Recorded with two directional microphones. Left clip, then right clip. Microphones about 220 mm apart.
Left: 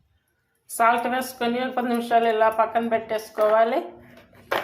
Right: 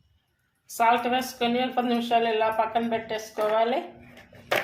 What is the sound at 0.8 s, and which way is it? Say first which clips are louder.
A woman's voice: left 2 dB; 15° left (ahead or behind).